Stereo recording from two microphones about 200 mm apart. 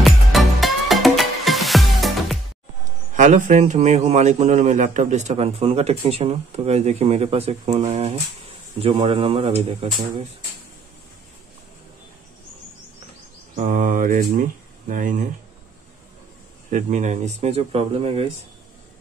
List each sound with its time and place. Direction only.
0.0 s music: centre (ahead or behind)
3.2 s a man's voice: 40° right (ahead or behind)
13.6 s a man's voice: 40° right (ahead or behind)
16.7 s a man's voice: 35° right (ahead or behind)